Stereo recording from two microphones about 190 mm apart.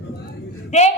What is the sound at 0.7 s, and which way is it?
Speech, 35° left (ahead or behind).